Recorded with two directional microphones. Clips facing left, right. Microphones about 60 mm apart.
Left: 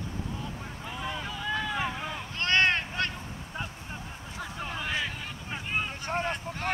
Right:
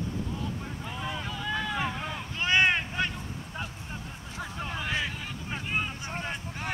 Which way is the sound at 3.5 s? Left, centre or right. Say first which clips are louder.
Left 2 dB; centre.